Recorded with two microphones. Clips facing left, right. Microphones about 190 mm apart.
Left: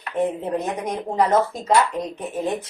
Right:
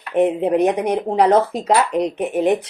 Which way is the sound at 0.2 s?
70° right (ahead or behind).